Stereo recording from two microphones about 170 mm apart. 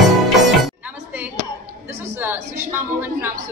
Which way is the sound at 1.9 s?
15° right (ahead or behind).